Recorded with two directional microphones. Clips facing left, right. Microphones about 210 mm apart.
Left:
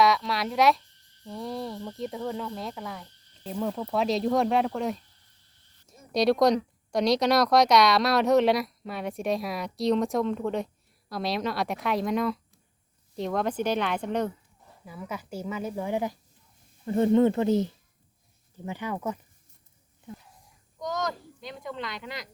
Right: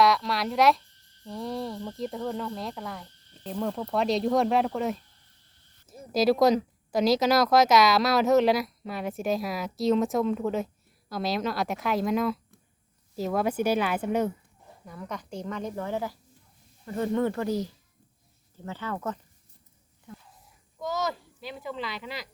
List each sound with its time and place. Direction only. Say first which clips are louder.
0.0 s speech: even; centre (ahead or behind)
6.1 s speech: even; centre (ahead or behind)
14.8 s speech: left 1 dB; 5° left (ahead or behind)
16.8 s speech: left 6 dB; 25° left (ahead or behind)
20.7 s speech: right 1 dB; 5° right (ahead or behind)